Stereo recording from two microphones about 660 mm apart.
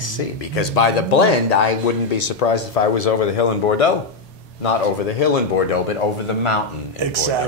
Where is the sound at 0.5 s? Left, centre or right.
Left.